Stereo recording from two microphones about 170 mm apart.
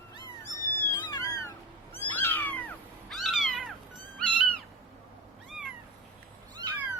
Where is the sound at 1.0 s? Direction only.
20° left (ahead or behind); by 3.7 s centre (ahead or behind).